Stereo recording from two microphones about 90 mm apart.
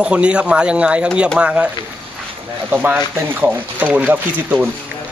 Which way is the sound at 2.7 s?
15° right (ahead or behind).